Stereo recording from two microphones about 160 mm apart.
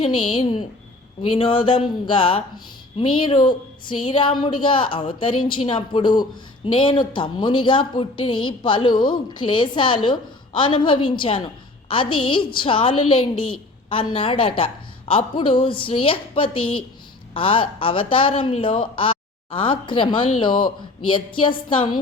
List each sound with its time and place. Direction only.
0.0 s a woman's voice: 35° left (ahead or behind)